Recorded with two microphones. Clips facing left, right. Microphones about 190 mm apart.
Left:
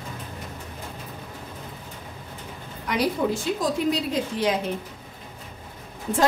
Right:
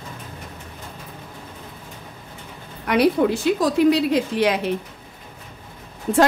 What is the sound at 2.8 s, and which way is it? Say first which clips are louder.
A woman's voice: right 6 dB; 65° right (ahead or behind).